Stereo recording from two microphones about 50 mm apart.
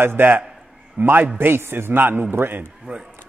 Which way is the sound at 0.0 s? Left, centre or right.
Right.